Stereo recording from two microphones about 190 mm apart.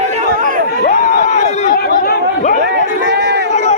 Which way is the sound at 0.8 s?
45° left (ahead or behind).